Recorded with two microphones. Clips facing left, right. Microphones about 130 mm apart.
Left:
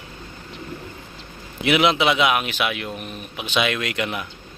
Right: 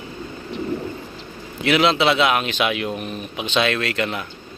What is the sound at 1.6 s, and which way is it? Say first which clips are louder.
Speech: right 1 dB; 15° left (ahead or behind).